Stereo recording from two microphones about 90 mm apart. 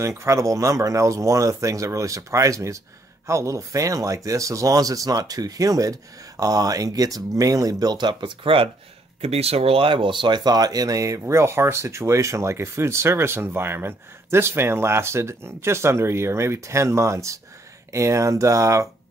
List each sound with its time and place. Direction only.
0.2 s speech: 35° right (ahead or behind); by 8.6 s 75° right (ahead or behind)
9.2 s speech: 90° right; by 11.1 s 40° right (ahead or behind)
11.1 s speech: 30° right (ahead or behind)